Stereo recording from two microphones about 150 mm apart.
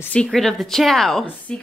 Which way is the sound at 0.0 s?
5° left (ahead or behind).